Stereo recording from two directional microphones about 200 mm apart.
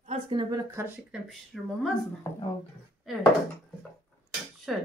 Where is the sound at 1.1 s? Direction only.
Centre (ahead or behind).